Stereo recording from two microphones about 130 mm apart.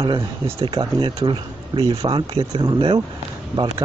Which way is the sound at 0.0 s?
30° right (ahead or behind).